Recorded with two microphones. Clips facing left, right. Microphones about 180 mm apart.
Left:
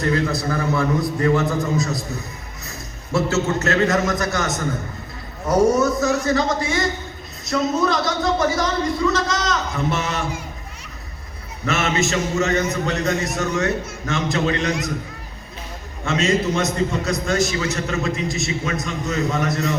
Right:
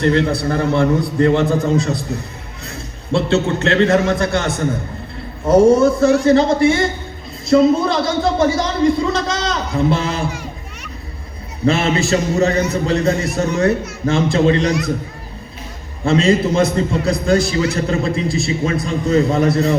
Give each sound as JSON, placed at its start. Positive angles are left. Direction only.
{"t": 0.3, "sound": "a man's voice", "side_deg": -30}
{"t": 11.6, "sound": "a man's voice", "side_deg": -30}
{"t": 16.0, "sound": "a man's voice", "side_deg": -30}